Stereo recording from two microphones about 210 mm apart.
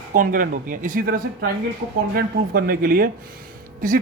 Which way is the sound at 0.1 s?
40° right (ahead or behind).